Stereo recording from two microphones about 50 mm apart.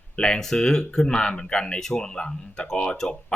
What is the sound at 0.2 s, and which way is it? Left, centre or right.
Speech, centre.